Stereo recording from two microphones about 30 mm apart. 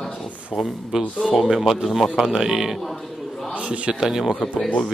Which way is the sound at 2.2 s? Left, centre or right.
Centre.